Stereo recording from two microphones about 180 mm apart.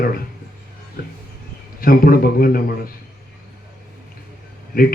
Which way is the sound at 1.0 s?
55° left (ahead or behind).